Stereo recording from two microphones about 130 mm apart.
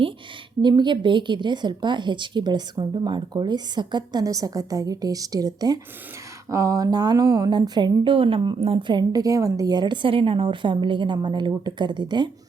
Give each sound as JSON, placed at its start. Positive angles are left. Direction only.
{"t": 0.6, "sound": "a woman's voice", "side_deg": -35}
{"t": 9.0, "sound": "a woman's voice", "side_deg": -30}